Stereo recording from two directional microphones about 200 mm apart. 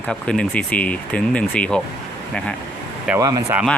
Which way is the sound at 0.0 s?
5° left (ahead or behind).